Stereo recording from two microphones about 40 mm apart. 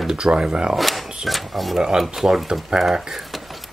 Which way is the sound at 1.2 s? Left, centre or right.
Centre.